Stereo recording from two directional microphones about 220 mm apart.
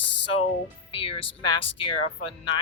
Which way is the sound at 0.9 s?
25° left (ahead or behind).